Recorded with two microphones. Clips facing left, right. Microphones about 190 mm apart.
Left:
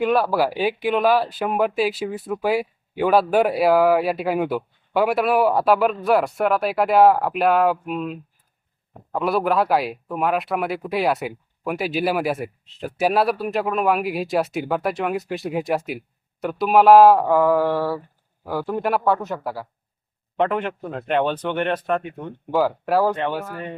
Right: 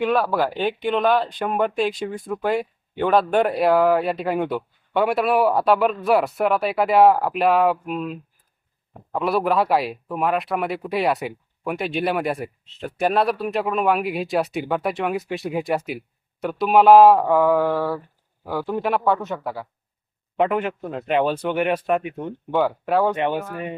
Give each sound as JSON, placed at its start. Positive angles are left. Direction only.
{"t": 0.0, "sound": "speech", "side_deg": 5}
{"t": 22.5, "sound": "speech", "side_deg": 5}
{"t": 23.1, "sound": "speech", "side_deg": -15}